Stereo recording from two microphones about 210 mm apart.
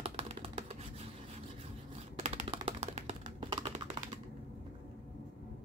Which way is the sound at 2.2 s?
30° right (ahead or behind).